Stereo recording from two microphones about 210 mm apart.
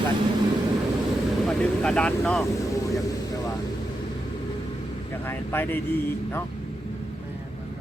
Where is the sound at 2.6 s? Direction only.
15° left (ahead or behind).